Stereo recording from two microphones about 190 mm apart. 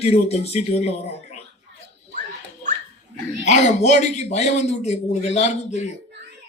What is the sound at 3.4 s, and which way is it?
A man's voice, 40° left (ahead or behind).